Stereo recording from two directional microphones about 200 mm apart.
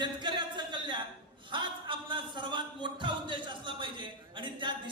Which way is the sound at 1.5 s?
25° right (ahead or behind).